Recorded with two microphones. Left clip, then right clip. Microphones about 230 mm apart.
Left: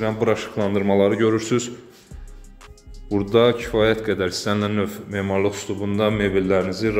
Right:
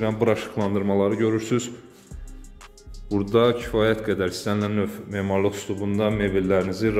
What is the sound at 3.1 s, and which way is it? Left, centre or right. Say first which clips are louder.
A man's voice: left 3 dB; centre.